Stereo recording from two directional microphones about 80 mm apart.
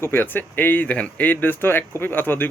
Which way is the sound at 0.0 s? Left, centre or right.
Left.